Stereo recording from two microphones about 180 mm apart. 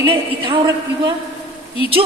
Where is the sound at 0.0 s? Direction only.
25° right (ahead or behind).